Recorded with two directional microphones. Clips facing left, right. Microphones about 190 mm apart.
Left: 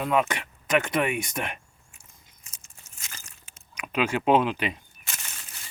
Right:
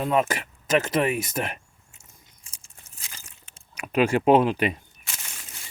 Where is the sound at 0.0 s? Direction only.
35° right (ahead or behind).